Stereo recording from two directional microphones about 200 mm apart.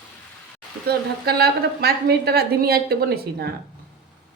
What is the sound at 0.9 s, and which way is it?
A woman's voice, 50° right (ahead or behind).